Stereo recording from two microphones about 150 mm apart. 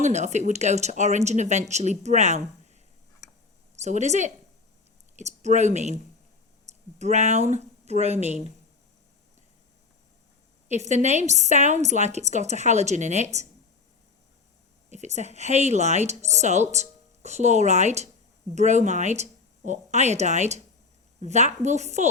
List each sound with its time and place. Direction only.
0.0 s speech: 50° right (ahead or behind)
3.8 s speech: 50° right (ahead or behind)
8.2 s speech: 45° left (ahead or behind)
10.7 s speech: 50° right (ahead or behind)
14.8 s speech: 50° right (ahead or behind)